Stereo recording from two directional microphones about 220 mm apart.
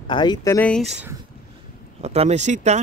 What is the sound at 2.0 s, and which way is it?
Speech, 30° right (ahead or behind).